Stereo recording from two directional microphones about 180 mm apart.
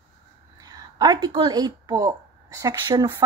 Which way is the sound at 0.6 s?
20° right (ahead or behind).